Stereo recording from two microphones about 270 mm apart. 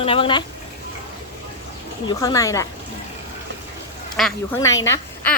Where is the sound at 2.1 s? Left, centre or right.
Centre.